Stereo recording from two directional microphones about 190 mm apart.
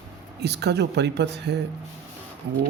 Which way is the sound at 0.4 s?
60° right (ahead or behind).